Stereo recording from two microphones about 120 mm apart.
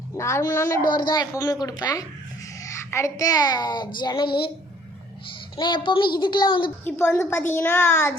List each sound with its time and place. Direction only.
0.1 s a woman's voice: 25° left (ahead or behind)
0.9 s a child's voice: 35° left (ahead or behind)
5.5 s a child's voice: 40° left (ahead or behind)
6.8 s a woman's voice: 20° left (ahead or behind)